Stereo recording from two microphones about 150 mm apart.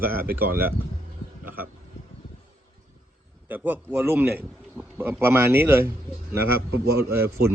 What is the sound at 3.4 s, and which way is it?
A man's voice, 10° right (ahead or behind).